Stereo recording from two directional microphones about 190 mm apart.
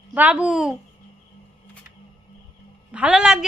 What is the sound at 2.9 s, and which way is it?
Speech, 5° right (ahead or behind).